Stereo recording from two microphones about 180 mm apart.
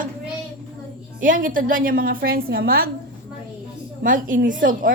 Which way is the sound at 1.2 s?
50° right (ahead or behind).